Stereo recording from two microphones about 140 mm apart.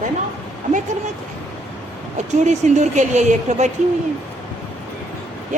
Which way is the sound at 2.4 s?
55° right (ahead or behind).